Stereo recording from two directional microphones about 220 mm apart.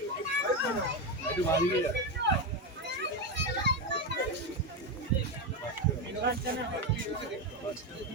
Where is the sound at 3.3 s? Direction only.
50° right (ahead or behind).